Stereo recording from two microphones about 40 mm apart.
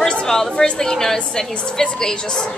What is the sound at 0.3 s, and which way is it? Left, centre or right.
A woman's voice, centre.